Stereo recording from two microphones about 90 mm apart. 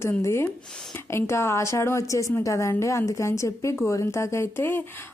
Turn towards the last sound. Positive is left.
turn(degrees=25)  # may be behind; listen again after turning